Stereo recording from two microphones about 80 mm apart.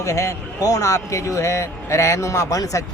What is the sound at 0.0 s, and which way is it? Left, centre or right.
Speech, left.